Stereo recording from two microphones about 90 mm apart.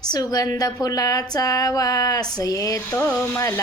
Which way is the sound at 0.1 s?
45° left (ahead or behind).